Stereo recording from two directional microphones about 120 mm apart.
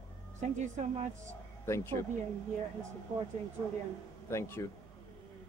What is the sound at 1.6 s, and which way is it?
Speech, 20° left (ahead or behind).